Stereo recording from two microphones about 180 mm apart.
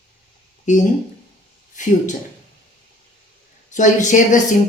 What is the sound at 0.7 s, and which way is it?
A woman's voice, 45° left (ahead or behind).